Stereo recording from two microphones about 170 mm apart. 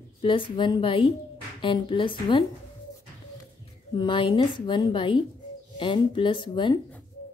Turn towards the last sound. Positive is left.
turn(degrees=25)  # may be behind; listen again after turning